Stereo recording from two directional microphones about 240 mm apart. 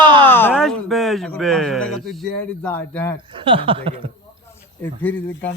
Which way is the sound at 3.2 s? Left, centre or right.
Right.